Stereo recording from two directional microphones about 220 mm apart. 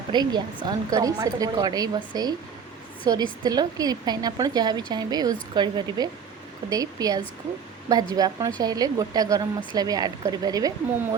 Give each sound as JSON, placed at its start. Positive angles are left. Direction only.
{"t": 0.1, "sound": "a woman's voice", "side_deg": -20}